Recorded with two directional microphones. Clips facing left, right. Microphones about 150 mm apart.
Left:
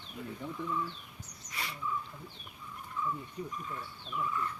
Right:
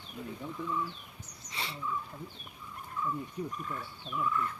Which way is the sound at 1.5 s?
25° right (ahead or behind).